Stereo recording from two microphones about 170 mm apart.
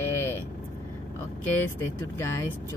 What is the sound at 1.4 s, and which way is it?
Speech, 10° left (ahead or behind).